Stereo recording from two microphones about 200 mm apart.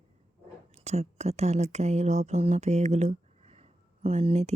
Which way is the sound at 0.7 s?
30° right (ahead or behind).